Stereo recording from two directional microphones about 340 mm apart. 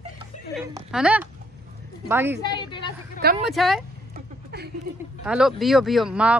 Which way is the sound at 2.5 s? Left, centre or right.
Centre.